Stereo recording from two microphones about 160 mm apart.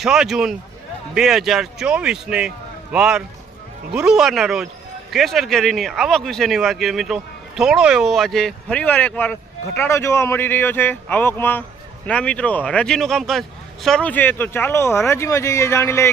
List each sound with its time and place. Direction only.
0.0 s speech: 5° right (ahead or behind); by 16.1 s 15° left (ahead or behind)